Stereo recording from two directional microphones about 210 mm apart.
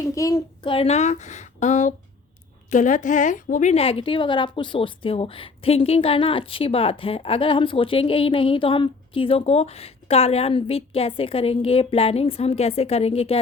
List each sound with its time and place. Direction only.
0.1 s a woman's voice: 15° left (ahead or behind)